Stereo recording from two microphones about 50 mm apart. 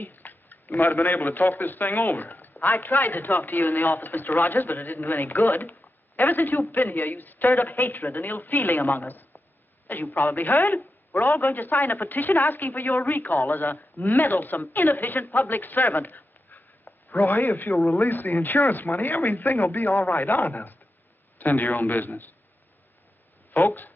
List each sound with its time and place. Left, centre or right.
0.0 s a man's voice: left
21.5 s a man's voice: left
23.6 s a man's voice: left